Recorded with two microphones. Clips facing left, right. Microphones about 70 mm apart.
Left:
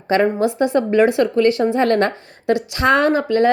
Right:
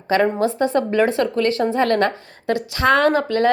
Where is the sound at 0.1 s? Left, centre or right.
Left.